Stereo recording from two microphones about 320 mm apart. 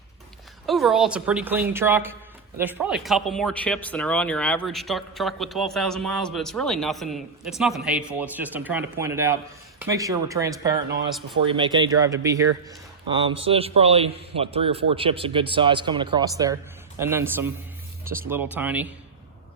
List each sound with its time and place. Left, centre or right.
0.7 s a man's voice: centre